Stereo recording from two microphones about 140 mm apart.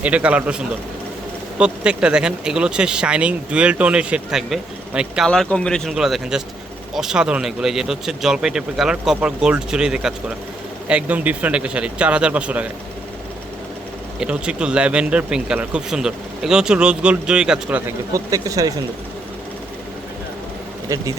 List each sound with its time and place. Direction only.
0.0 s speech: 10° right (ahead or behind)
1.5 s speech: 5° right (ahead or behind)
14.2 s speech: 5° right (ahead or behind)
18.1 s speech: 25° right (ahead or behind)